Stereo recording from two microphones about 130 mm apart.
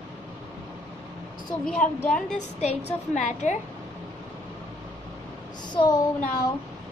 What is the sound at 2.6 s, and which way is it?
Speech, 60° left (ahead or behind).